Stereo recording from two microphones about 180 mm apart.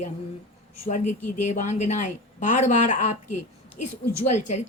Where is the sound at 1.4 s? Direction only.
40° left (ahead or behind).